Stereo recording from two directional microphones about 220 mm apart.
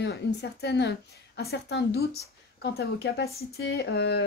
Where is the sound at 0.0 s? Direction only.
50° left (ahead or behind).